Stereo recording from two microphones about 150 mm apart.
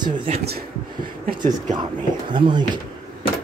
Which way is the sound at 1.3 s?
60° right (ahead or behind).